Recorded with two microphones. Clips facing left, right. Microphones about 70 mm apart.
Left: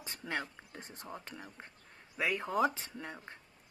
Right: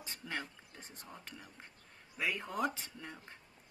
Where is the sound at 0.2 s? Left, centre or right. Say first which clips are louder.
Left 4 dB; left.